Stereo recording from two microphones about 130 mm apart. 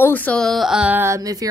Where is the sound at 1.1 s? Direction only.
25° right (ahead or behind).